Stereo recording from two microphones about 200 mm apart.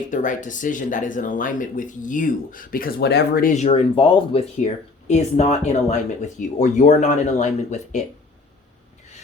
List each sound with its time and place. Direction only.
0.1 s speech: 40° left (ahead or behind)
3.5 s speech: 35° left (ahead or behind)